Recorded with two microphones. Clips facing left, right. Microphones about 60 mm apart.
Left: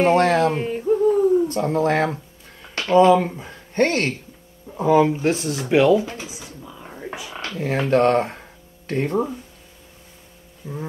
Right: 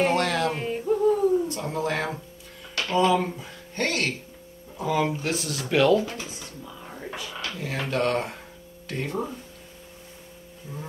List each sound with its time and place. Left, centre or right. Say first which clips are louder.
0.0 s speech: left 7 dB; left
0.7 s a sound: left 4 dB; centre
1.5 s speech: left 8 dB; left; by 6.2 s centre
6.2 s speech: left 2 dB; centre
7.3 s speech: left 9 dB; left
10.6 s speech: left 7 dB; left